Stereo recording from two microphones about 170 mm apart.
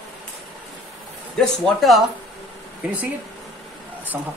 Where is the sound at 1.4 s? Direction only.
Centre (ahead or behind).